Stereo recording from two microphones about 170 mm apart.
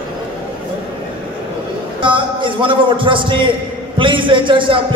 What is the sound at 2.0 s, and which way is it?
A man's voice, 30° right (ahead or behind).